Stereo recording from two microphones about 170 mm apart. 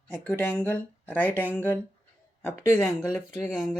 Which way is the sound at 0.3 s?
10° left (ahead or behind).